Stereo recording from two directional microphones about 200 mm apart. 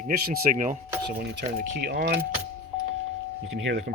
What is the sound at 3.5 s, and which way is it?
Speech, 70° right (ahead or behind).